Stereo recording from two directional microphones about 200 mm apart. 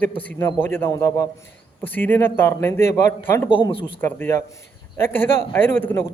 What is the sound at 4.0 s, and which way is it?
A man's voice, 10° left (ahead or behind).